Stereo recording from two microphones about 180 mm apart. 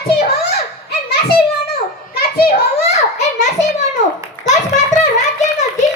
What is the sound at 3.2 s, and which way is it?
Children playing, 40° left (ahead or behind).